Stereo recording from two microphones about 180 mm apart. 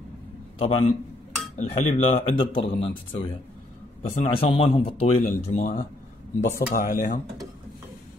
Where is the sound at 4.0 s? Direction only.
40° left (ahead or behind).